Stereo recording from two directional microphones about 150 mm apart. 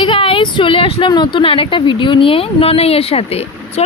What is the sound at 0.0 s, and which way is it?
Speech, 35° left (ahead or behind).